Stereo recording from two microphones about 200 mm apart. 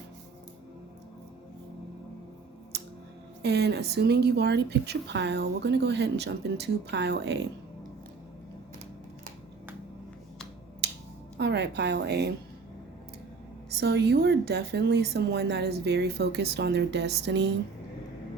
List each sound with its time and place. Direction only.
2.7 s scissors: 55° right (ahead or behind)
3.4 s speech: 55° right (ahead or behind)
10.8 s finger snapping: 55° right (ahead or behind)
11.3 s speech: 55° right (ahead or behind)
13.7 s speech: 55° right (ahead or behind)